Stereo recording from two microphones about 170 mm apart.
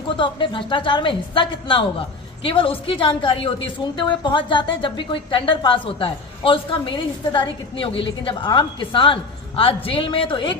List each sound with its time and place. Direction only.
0.2 s a woman's voice: 30° left (ahead or behind)